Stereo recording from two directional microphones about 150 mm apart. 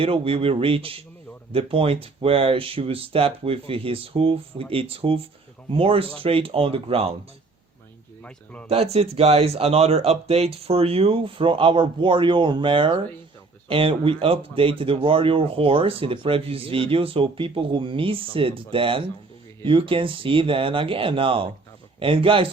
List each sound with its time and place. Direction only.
0.0 s speech: 40° right (ahead or behind)
8.2 s a man's voice: 10° left (ahead or behind)
8.7 s speech: 40° right (ahead or behind)